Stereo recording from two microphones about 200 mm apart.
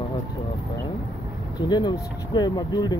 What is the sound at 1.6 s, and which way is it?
Speech, 20° left (ahead or behind).